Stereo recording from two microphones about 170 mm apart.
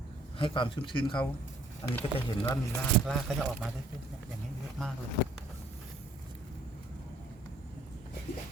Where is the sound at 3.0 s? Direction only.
Centre (ahead or behind).